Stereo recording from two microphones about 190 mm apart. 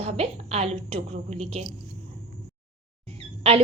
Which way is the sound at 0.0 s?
35° right (ahead or behind).